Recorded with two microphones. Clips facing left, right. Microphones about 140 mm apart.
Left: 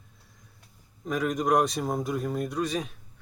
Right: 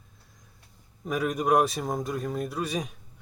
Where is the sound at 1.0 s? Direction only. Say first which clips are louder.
Even; 10° right (ahead or behind).